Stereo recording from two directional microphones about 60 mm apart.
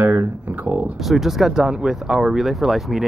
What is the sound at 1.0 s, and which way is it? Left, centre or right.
Speech, centre.